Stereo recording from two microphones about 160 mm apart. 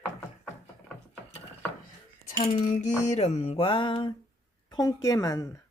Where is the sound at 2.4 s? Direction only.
45° left (ahead or behind); by 4.1 s 30° left (ahead or behind).